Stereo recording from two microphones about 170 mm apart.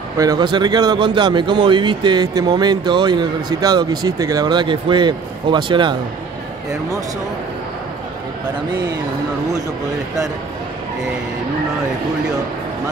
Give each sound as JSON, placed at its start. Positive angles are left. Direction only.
{"t": 0.2, "sound": "a man's voice", "side_deg": -25}